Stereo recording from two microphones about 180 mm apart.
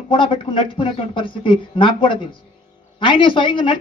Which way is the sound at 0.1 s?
30° left (ahead or behind).